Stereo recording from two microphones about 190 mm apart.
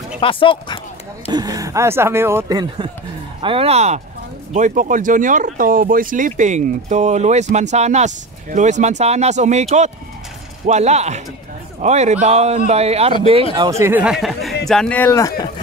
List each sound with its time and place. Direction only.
0.2 s speech: 30° left (ahead or behind)
1.3 s speech: 20° right (ahead or behind)
13.6 s speech: 15° right (ahead or behind); by 15.5 s 20° left (ahead or behind)